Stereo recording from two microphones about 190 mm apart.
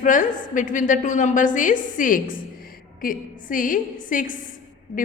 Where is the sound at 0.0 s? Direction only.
40° left (ahead or behind).